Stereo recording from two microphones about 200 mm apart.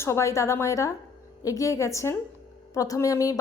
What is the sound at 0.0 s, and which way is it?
A woman's voice, 15° left (ahead or behind).